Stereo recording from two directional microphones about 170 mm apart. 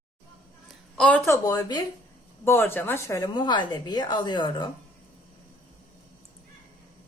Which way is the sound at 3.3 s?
25° left (ahead or behind).